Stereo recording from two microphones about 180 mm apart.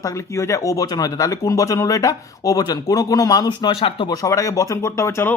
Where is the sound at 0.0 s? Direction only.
15° left (ahead or behind).